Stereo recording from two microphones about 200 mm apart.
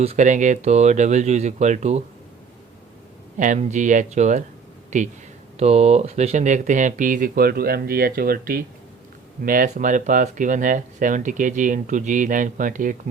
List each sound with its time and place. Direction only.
0.0 s speech: 35° right (ahead or behind)
3.3 s speech: 40° right (ahead or behind)